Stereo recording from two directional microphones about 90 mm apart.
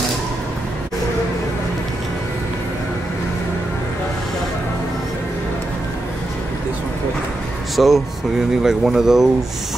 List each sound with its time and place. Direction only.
7.7 s speech: centre (ahead or behind)